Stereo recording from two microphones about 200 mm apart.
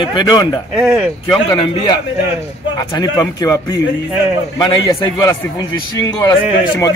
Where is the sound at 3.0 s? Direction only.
20° left (ahead or behind).